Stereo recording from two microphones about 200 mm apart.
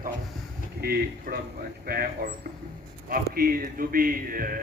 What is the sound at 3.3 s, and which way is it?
Speech, 45° right (ahead or behind).